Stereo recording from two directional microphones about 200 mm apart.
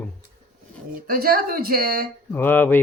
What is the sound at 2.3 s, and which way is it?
Speech, 10° left (ahead or behind).